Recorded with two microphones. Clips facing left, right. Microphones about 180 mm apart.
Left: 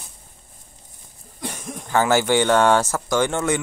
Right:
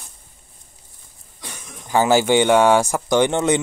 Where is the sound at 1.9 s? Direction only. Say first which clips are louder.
Right 2 dB; 15° right (ahead or behind).